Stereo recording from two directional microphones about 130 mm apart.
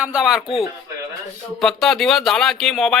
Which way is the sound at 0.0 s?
5° right (ahead or behind).